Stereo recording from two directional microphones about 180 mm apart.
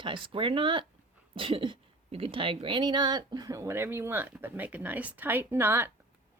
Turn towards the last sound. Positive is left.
turn(degrees=-15)  # may be behind; listen again after turning